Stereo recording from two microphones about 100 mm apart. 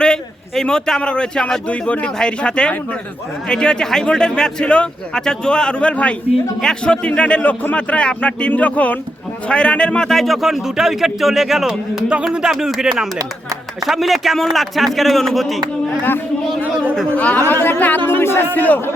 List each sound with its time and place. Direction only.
0.0 s a man's voice: 5° left (ahead or behind)
17.2 s a man's voice: 15° left (ahead or behind)